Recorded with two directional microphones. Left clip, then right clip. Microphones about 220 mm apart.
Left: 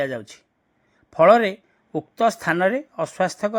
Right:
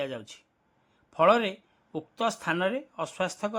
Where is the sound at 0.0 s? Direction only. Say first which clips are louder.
Left 8 dB; 15° left (ahead or behind).